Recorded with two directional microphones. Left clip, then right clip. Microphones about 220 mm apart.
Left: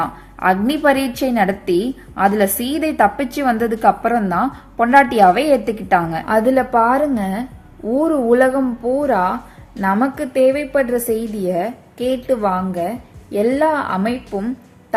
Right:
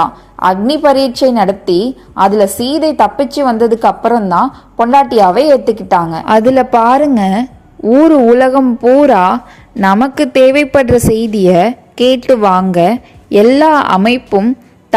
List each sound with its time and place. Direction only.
0.3 s a woman's voice: 15° right (ahead or behind)
1.5 s a woman's voice: 5° left (ahead or behind)
2.2 s a woman's voice: 15° right (ahead or behind)
4.4 s a woman's voice: centre (ahead or behind)
4.9 s a woman's voice: 15° right (ahead or behind)
6.2 s a woman's voice: 30° right (ahead or behind)